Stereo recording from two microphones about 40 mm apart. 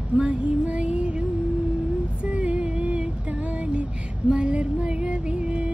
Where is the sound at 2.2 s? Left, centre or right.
Right.